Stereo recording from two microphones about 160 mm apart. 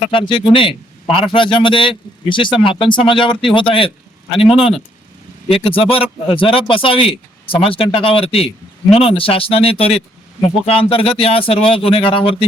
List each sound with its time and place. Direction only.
0.1 s speech: 30° left (ahead or behind)